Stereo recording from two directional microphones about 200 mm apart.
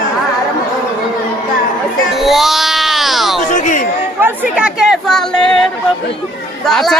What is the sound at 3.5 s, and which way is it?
Chatter, 40° left (ahead or behind).